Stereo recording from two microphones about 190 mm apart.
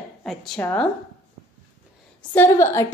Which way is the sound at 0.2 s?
5° left (ahead or behind).